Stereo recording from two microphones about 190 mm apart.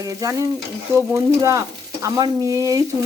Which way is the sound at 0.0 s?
20° right (ahead or behind).